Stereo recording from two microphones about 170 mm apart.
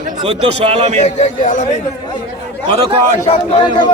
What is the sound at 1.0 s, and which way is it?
Speech, 50° left (ahead or behind).